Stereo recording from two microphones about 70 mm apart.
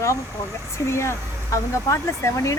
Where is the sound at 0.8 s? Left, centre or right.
Left.